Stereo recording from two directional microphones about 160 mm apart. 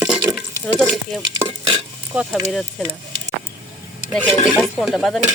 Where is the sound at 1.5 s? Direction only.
35° right (ahead or behind).